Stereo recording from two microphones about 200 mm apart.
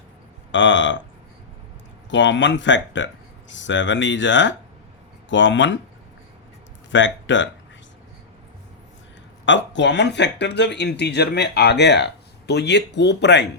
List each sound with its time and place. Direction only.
0.5 s speech: 65° left (ahead or behind)
2.0 s speech: 65° left (ahead or behind)
6.9 s speech: 65° left (ahead or behind)
9.5 s speech: 60° left (ahead or behind)